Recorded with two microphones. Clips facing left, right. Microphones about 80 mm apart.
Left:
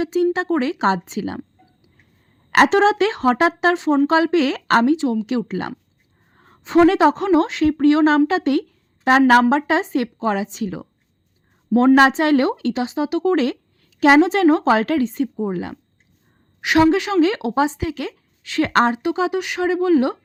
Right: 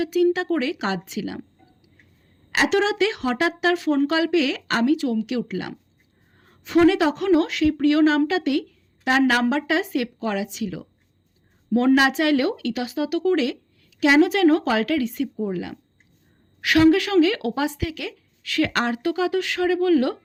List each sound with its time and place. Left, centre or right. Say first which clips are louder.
0.0 s a woman's voice: left 1 dB; left
2.6 s a woman's voice: left 5 dB; left
4.9 s a woman's voice: left 3 dB; left
11.9 s a woman's voice: left 5 dB; left